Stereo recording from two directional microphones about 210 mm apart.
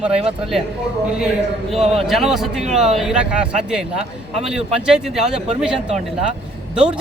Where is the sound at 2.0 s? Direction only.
Centre (ahead or behind).